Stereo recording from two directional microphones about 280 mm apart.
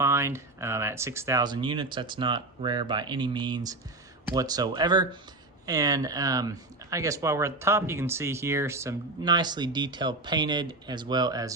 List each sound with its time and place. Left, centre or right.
0.0 s speech: centre